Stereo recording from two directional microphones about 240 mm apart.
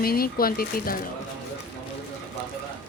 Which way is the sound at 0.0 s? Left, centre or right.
Left.